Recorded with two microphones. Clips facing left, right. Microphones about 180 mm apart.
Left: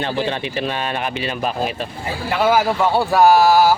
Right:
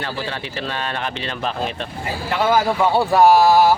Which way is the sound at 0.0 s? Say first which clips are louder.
Left 5 dB; 20° left (ahead or behind).